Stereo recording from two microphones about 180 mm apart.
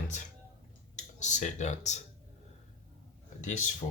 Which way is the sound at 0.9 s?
40° left (ahead or behind).